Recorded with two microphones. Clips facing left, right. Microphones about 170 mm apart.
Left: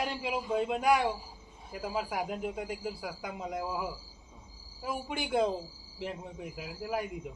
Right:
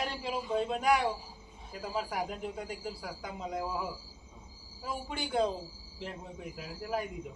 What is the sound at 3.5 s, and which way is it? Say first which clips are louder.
Speech: even; 5° left (ahead or behind).